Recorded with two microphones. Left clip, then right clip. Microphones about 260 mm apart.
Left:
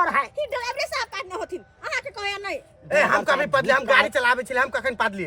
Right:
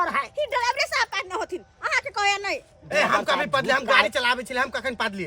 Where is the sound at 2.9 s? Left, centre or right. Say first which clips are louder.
Left 2 dB; centre.